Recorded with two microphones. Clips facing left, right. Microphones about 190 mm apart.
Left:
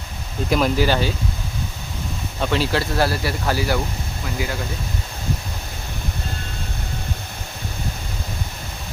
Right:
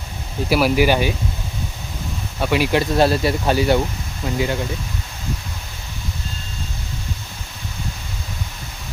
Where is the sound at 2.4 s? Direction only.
10° right (ahead or behind).